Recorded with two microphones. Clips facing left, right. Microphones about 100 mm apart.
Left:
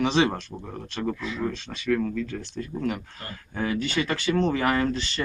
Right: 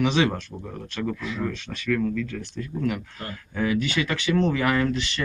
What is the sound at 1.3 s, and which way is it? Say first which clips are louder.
Speech: even; 25° left (ahead or behind).